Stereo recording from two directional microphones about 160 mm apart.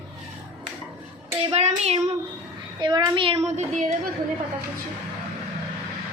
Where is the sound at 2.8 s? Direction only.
25° right (ahead or behind).